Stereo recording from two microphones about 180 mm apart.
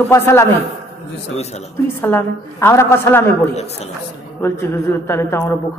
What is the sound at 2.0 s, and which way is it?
A man's voice, 10° left (ahead or behind).